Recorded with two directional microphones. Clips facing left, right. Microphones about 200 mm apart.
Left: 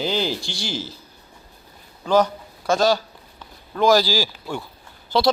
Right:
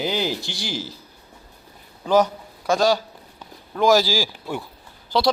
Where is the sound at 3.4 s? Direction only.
5° right (ahead or behind).